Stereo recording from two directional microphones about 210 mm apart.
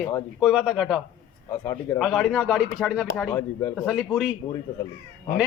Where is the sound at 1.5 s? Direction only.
10° left (ahead or behind).